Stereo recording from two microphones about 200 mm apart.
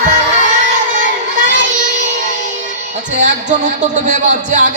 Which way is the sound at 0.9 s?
40° right (ahead or behind).